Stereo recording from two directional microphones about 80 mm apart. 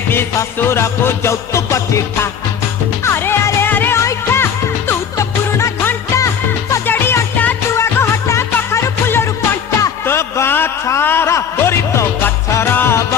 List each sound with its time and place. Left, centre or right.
0.1 s music: left
5.8 s music: left
6.1 s music: left
6.8 s music: left
7.8 s music: left
10.1 s a sound: left